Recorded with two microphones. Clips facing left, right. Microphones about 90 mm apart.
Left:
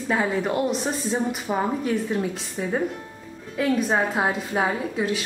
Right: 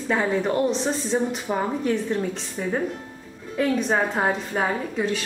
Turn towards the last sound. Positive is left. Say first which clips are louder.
# even
turn(degrees=5)  # may be behind; listen again after turning